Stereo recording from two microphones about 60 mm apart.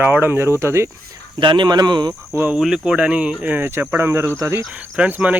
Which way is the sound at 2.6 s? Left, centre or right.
Centre.